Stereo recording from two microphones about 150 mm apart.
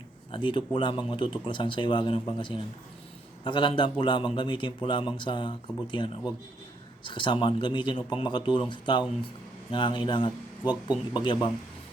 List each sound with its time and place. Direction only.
0.3 s speech: 35° left (ahead or behind)